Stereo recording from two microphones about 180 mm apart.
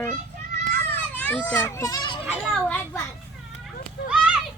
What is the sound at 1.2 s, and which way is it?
A child's voice, 10° left (ahead or behind).